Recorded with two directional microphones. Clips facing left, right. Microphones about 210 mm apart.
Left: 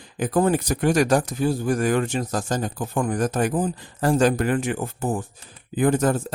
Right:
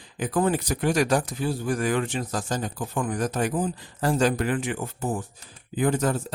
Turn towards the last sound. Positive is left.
turn(degrees=50)  # may be behind; listen again after turning